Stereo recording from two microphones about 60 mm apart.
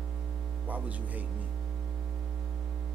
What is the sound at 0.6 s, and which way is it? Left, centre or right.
Speech, right.